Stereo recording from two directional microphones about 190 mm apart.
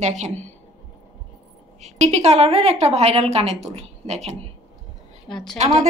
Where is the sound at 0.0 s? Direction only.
35° right (ahead or behind).